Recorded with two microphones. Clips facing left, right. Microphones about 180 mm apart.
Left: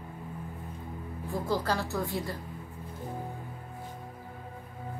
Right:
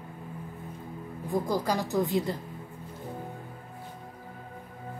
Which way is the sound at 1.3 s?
15° right (ahead or behind).